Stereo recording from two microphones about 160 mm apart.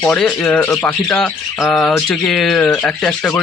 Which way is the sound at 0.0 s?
10° left (ahead or behind).